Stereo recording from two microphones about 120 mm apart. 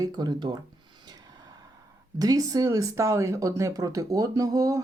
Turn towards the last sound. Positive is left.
turn(degrees=-30)  # may be behind; listen again after turning